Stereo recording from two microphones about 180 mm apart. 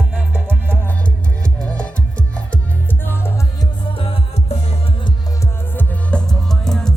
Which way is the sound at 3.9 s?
30° left (ahead or behind).